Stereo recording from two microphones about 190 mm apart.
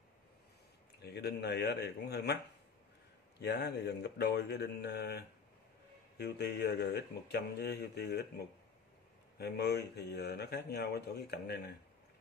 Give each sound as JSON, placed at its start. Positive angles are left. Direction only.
{"t": 1.0, "sound": "speech", "side_deg": 60}
{"t": 3.3, "sound": "speech", "side_deg": 60}